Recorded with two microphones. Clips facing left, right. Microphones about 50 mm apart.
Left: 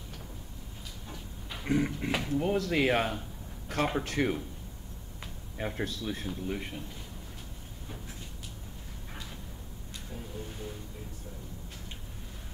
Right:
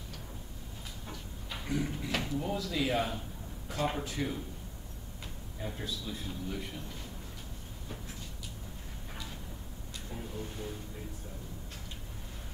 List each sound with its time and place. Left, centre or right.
1.6 s a sound: left
2.2 s speech: left
3.6 s a sound: left
4.0 s speech: left
5.6 s speech: left
6.2 s speech: left